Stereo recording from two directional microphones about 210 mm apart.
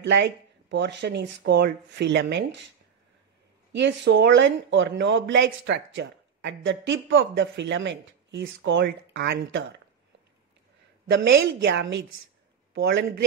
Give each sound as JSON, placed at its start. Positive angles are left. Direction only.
{"t": 0.0, "sound": "speech", "side_deg": -55}
{"t": 3.7, "sound": "speech", "side_deg": -55}
{"t": 11.1, "sound": "a man's voice", "side_deg": -55}